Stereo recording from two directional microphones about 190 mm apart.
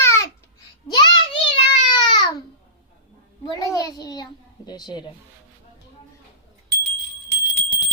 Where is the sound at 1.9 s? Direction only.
25° left (ahead or behind).